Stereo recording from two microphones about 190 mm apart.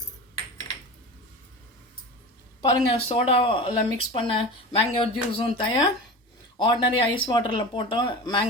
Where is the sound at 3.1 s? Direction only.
30° left (ahead or behind).